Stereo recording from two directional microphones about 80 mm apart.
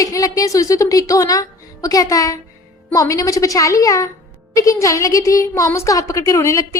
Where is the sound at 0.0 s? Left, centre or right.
Left.